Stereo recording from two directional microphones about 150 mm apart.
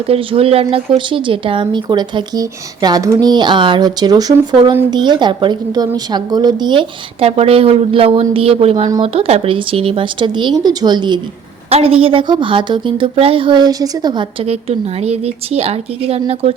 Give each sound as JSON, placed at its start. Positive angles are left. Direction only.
{"t": 0.1, "sound": "a woman's voice", "side_deg": -40}
{"t": 11.7, "sound": "a woman's voice", "side_deg": -40}